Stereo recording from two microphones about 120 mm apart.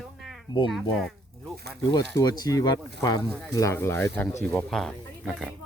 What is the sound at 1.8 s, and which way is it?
Speech, 35° left (ahead or behind).